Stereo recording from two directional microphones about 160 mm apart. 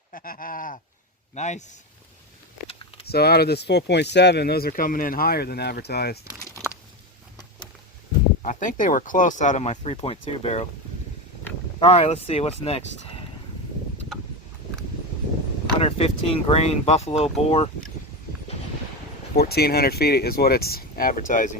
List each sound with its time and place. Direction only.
0.1 s sheep: 60° left (ahead or behind)
1.4 s speech: 45° left (ahead or behind)
2.6 s a sound: 35° left (ahead or behind)
3.1 s speech: 80° left
8.4 s speech: 50° left (ahead or behind)
11.8 s speech: 40° left (ahead or behind)
15.8 s speech: 40° left (ahead or behind)
19.4 s speech: 80° left; by 21.5 s 55° left (ahead or behind)